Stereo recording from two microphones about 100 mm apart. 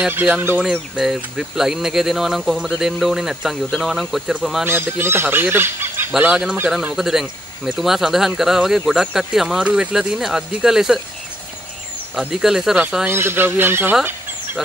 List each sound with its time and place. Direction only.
0.1 s speech: 20° right (ahead or behind)
0.6 s speech: 5° right (ahead or behind)
4.6 s speech: 20° right (ahead or behind)
6.7 s speech: 5° right (ahead or behind)
12.2 s speech: 5° right (ahead or behind)
13.0 s speech: 25° right (ahead or behind)